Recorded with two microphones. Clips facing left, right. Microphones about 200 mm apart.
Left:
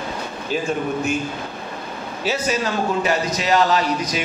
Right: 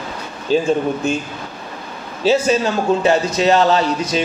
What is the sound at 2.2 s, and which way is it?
A man's voice, 30° right (ahead or behind).